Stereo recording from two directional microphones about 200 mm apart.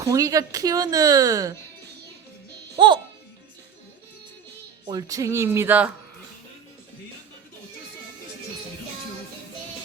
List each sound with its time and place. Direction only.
0.0 s speech: 15° right (ahead or behind)
2.7 s speech: 25° right (ahead or behind)
4.9 s speech: 20° right (ahead or behind)